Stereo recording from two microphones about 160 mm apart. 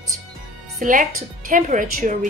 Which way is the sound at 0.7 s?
55° right (ahead or behind).